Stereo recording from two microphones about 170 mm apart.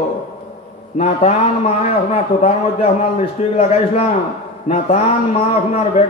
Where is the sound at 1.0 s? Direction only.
35° left (ahead or behind).